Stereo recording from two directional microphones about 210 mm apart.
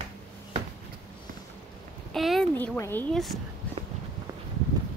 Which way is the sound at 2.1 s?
Centre (ahead or behind).